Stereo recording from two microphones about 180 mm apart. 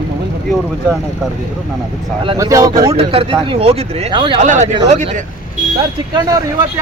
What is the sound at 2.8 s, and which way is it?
Speech, 30° right (ahead or behind).